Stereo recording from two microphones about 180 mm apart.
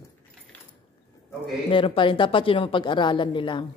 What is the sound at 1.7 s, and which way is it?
Speech, 30° left (ahead or behind).